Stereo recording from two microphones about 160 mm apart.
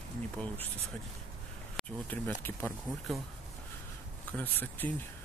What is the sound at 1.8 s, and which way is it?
Speech, 10° left (ahead or behind).